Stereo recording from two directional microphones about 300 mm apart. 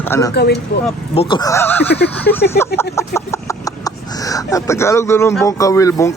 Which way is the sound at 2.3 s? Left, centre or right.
Left.